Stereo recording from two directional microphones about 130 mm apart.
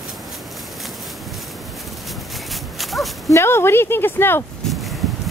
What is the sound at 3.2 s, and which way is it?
Speech, 20° left (ahead or behind).